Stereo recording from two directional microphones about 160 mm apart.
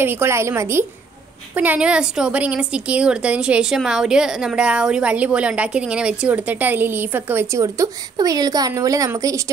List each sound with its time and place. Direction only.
0.0 s a woman's voice: 15° right (ahead or behind)